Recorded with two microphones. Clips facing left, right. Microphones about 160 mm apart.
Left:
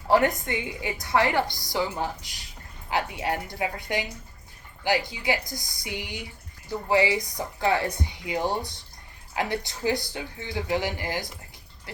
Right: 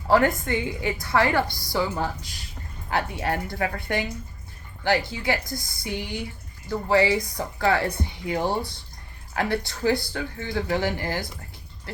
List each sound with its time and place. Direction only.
0.1 s a woman's voice: 20° left (ahead or behind)